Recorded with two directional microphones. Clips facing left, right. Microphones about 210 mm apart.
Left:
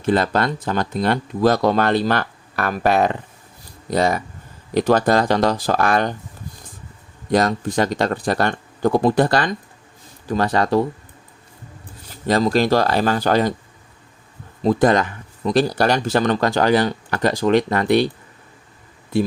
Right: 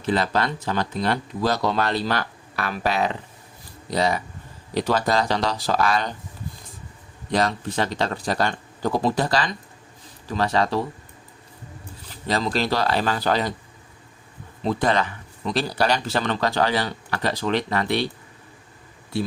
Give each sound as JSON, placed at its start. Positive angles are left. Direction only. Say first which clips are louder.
{"t": 0.0, "sound": "speech", "louder": "left 4 dB", "side_deg": 50}
{"t": 7.3, "sound": "speech", "louder": "left 5 dB", "side_deg": 45}
{"t": 12.3, "sound": "speech", "louder": "left 7 dB", "side_deg": 45}
{"t": 14.6, "sound": "speech", "louder": "left 6 dB", "side_deg": 45}